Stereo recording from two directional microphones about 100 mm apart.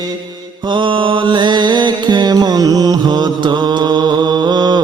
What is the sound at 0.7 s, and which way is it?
Mantra, 55° right (ahead or behind).